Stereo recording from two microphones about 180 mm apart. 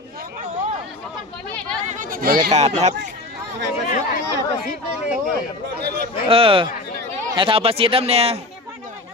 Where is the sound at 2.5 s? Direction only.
40° right (ahead or behind).